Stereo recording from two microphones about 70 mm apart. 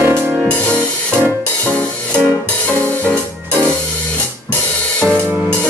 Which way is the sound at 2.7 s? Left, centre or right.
Left.